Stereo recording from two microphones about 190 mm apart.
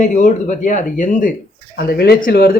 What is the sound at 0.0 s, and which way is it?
Speech, 40° left (ahead or behind).